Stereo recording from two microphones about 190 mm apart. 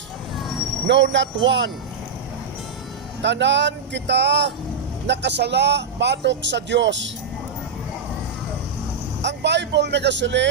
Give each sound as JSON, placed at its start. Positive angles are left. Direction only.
{"t": 0.9, "sound": "a man's voice", "side_deg": -70}
{"t": 3.2, "sound": "a man's voice", "side_deg": -65}
{"t": 9.2, "sound": "a man's voice", "side_deg": -65}